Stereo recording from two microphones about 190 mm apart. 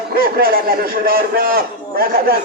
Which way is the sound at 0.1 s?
50° right (ahead or behind).